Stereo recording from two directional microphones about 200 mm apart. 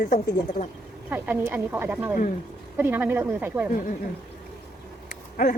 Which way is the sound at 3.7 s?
45° left (ahead or behind).